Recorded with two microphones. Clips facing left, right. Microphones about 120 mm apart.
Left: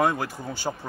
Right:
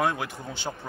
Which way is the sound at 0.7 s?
20° left (ahead or behind).